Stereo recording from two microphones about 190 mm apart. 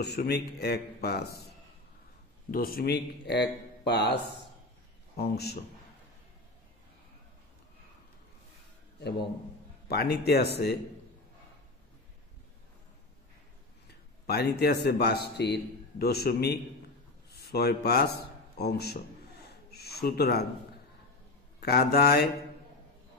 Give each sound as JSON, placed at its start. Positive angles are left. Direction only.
{"t": 0.0, "sound": "a man's voice", "side_deg": 60}
{"t": 2.5, "sound": "a man's voice", "side_deg": 50}
{"t": 9.8, "sound": "a man's voice", "side_deg": 60}
{"t": 13.8, "sound": "a man's voice", "side_deg": 55}
{"t": 18.6, "sound": "a sound", "side_deg": 55}
{"t": 21.5, "sound": "a man's voice", "side_deg": 55}